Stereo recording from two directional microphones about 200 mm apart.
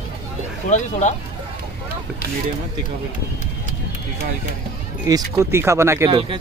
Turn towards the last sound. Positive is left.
turn(degrees=-15)  # may be behind; listen again after turning